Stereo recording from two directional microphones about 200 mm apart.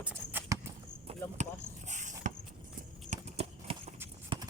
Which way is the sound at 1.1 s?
35° right (ahead or behind).